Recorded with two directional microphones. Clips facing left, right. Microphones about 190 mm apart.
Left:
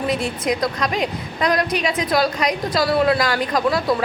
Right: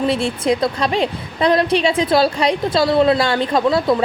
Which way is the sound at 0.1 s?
30° right (ahead or behind).